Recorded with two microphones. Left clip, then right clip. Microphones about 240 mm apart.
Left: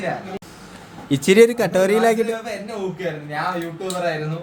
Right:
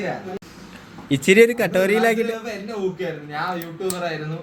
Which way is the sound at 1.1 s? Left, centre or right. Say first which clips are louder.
Left 1 dB; centre.